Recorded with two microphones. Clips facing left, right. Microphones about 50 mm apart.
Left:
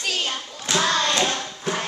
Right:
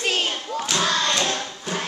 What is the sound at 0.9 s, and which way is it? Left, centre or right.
Hands, centre.